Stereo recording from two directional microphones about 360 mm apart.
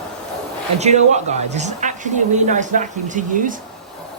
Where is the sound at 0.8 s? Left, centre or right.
Centre.